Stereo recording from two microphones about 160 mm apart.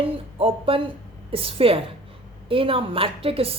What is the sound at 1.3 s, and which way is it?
Speech, 35° right (ahead or behind).